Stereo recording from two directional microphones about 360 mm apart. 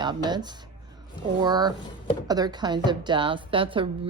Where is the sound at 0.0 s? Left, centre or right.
Centre.